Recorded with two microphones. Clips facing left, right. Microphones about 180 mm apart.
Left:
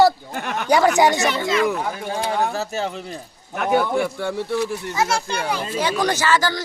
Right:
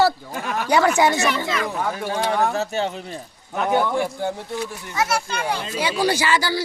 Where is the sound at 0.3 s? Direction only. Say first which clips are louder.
Even; 65° left (ahead or behind).